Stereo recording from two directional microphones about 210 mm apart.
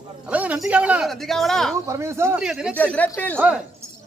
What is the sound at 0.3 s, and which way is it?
Speech, 5° right (ahead or behind).